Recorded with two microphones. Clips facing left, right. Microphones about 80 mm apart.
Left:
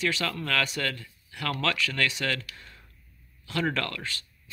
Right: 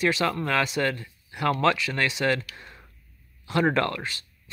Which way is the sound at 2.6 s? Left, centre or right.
Right.